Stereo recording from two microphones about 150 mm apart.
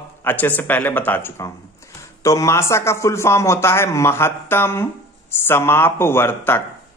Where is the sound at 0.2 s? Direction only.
10° left (ahead or behind).